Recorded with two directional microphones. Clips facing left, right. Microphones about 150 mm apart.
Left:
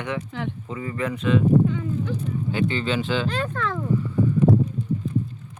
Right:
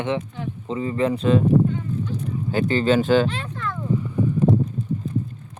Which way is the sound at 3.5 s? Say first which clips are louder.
Left 3 dB; 90° left.